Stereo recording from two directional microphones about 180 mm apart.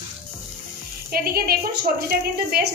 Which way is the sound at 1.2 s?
55° right (ahead or behind).